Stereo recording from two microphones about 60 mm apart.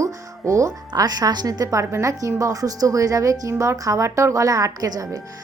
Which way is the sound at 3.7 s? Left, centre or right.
Right.